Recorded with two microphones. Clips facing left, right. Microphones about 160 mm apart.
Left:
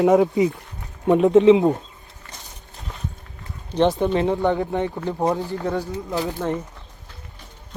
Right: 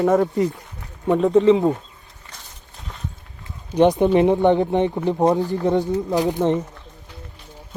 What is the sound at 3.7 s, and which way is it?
Speech, 15° right (ahead or behind).